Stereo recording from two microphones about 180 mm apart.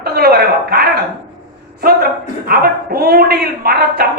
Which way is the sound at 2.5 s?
60° right (ahead or behind).